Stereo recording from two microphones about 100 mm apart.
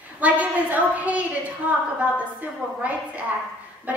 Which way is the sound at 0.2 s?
15° right (ahead or behind).